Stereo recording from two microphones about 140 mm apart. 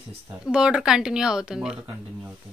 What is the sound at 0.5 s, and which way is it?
Speech, 5° right (ahead or behind).